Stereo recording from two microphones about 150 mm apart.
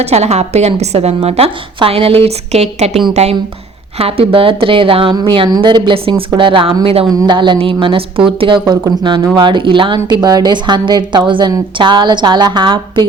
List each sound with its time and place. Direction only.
0.0 s a woman's voice: 45° right (ahead or behind)